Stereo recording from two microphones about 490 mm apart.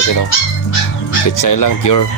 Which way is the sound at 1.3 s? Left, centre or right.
Left.